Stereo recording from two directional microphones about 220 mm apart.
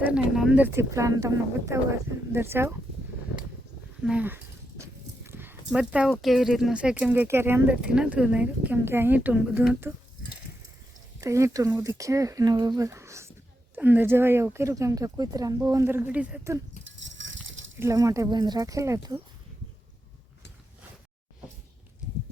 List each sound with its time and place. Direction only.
0.0 s speech: 5° right (ahead or behind)
4.0 s speech: 5° right (ahead or behind)
11.2 s speech: 15° right (ahead or behind)
16.8 s a sound: 55° right (ahead or behind)
17.7 s speech: 15° right (ahead or behind)